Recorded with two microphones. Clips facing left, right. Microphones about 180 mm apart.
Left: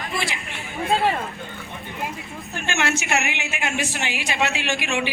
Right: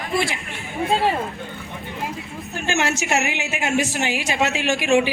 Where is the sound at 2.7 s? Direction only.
40° right (ahead or behind).